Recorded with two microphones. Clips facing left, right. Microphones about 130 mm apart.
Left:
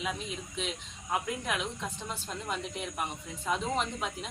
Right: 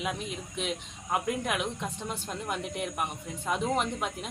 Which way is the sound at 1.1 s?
10° right (ahead or behind).